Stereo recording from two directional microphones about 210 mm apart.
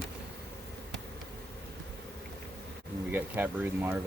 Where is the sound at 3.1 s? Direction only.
10° right (ahead or behind).